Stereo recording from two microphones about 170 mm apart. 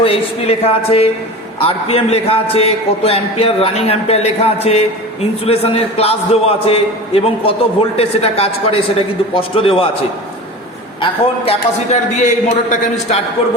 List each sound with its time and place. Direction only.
0.0 s a man's voice: 35° left (ahead or behind)
11.0 s a man's voice: 40° left (ahead or behind)